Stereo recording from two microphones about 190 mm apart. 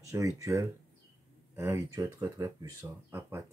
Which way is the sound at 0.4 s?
15° right (ahead or behind).